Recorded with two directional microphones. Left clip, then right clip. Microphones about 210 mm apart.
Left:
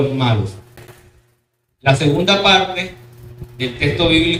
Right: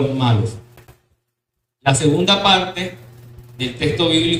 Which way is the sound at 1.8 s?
15° right (ahead or behind).